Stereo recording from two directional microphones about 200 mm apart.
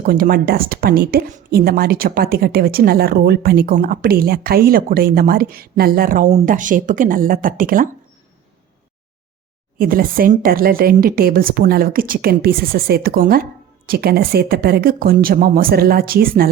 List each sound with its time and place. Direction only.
0.0 s speech: 45° right (ahead or behind)
9.7 s speech: 45° right (ahead or behind)